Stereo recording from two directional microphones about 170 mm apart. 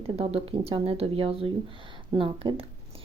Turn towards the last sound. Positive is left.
turn(degrees=-35)  # may be behind; listen again after turning